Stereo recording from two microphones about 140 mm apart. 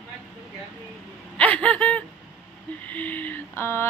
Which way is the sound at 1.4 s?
10° left (ahead or behind).